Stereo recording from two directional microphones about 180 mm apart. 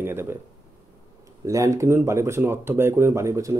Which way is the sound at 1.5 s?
15° right (ahead or behind).